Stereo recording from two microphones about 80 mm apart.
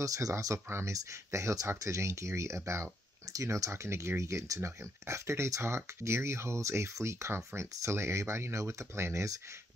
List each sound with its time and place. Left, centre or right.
0.0 s speech: right